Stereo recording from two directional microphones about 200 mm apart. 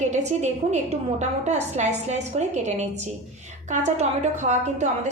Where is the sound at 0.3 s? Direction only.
35° right (ahead or behind).